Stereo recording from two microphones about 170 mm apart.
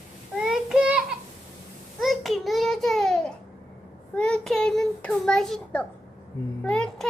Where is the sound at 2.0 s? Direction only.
Centre (ahead or behind).